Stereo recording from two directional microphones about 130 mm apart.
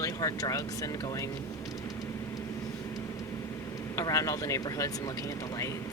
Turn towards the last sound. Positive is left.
turn(degrees=25)  # may be behind; listen again after turning